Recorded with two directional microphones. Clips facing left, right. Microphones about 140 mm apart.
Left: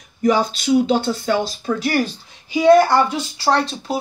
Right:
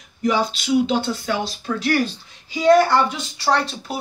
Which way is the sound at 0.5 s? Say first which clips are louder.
Left 3 dB; 45° left (ahead or behind).